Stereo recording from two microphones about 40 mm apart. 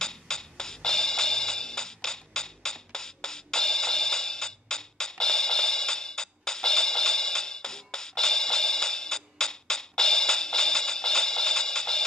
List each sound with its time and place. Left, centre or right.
0.0 s music: centre